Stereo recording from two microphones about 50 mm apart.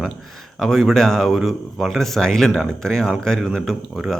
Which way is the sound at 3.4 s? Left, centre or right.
Centre.